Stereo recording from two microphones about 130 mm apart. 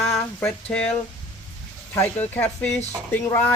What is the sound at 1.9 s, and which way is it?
Speech, 15° left (ahead or behind).